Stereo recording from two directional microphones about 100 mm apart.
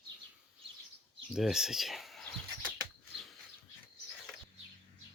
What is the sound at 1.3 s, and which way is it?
Speech, 5° right (ahead or behind).